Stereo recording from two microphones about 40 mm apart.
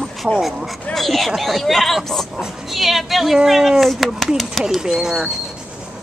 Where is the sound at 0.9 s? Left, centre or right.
Centre.